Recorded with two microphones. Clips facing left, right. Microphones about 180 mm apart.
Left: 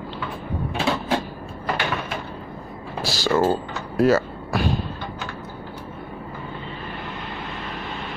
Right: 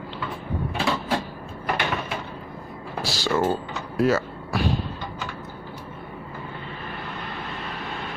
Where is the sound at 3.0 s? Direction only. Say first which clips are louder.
Left 3 dB; 40° left (ahead or behind).